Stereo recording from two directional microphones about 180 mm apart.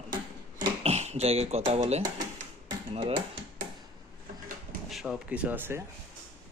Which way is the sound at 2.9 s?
30° right (ahead or behind).